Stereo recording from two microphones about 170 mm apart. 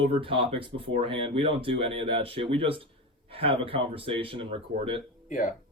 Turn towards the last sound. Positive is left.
turn(degrees=50)  # may be behind; listen again after turning